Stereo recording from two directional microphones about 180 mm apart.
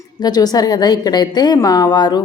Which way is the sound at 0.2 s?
20° left (ahead or behind).